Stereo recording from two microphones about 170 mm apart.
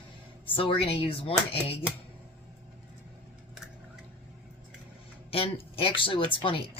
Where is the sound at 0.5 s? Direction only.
30° left (ahead or behind).